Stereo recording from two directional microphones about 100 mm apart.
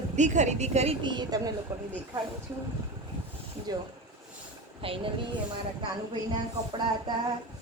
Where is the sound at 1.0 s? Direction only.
50° right (ahead or behind).